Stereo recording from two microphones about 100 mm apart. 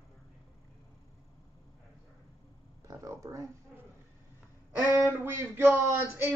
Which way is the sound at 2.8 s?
35° right (ahead or behind).